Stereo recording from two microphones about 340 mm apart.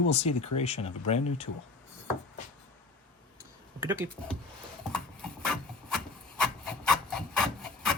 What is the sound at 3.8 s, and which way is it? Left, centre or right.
Speech, centre.